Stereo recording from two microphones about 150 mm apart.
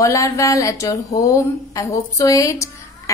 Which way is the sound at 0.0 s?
20° left (ahead or behind).